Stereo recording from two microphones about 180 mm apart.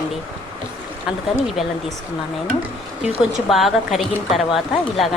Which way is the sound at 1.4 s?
Centre (ahead or behind).